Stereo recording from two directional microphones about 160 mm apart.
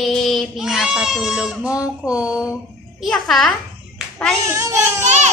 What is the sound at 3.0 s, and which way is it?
Child singing, centre (ahead or behind).